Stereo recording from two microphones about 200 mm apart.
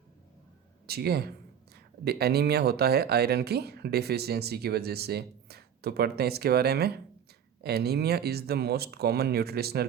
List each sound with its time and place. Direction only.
0.9 s speech: 50° right (ahead or behind)